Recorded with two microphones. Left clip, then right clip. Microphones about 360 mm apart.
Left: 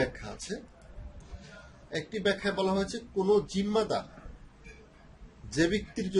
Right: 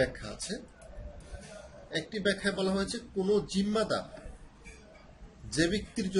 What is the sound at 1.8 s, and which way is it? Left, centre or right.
A man's voice, centre.